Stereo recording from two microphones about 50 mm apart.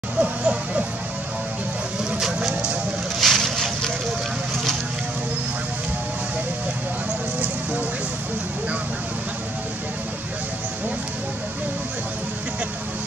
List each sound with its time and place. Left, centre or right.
0.2 s speech: right
2.0 s vehicle: centre
3.2 s boat: centre